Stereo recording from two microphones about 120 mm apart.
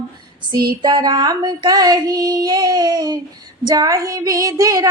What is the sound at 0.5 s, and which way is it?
Female singing, 35° right (ahead or behind).